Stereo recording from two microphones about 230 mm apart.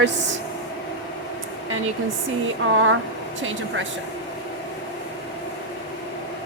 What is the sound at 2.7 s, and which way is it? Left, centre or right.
Speech, right.